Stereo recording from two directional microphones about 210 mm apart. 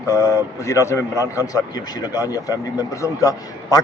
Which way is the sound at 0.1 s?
15° left (ahead or behind).